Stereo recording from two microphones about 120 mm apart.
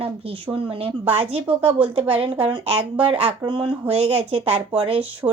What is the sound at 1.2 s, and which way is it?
Speech, 55° right (ahead or behind).